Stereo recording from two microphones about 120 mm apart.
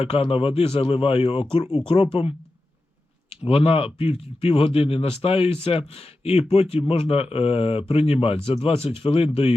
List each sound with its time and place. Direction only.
0.0 s speech: 55° left (ahead or behind)